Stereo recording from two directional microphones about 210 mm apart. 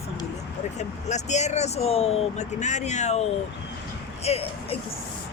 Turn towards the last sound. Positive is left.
turn(degrees=30)  # may be behind; listen again after turning